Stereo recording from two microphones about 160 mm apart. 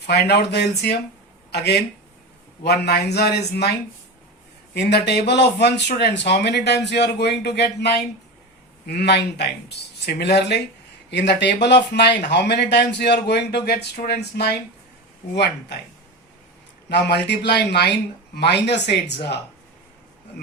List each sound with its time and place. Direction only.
0.1 s speech: 90° left
4.7 s speech: 90° left
13.7 s speech: 60° left (ahead or behind); by 14.6 s 90° left
16.9 s speech: 90° left